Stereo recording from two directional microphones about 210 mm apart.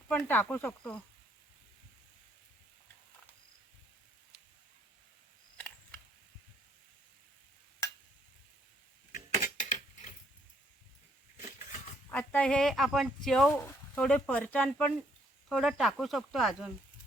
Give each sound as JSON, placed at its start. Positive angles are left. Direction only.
{"t": 0.1, "sound": "speech", "side_deg": 10}
{"t": 9.1, "sound": "a sound", "side_deg": 35}
{"t": 12.0, "sound": "speech", "side_deg": 10}